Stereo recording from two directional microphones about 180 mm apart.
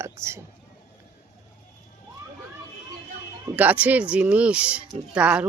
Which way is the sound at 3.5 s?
10° right (ahead or behind).